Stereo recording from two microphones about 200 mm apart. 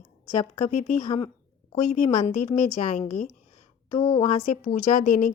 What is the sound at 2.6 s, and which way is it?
Speech, 45° left (ahead or behind).